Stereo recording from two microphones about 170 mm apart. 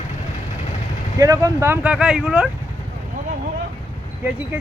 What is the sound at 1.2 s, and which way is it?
Speech, 20° right (ahead or behind).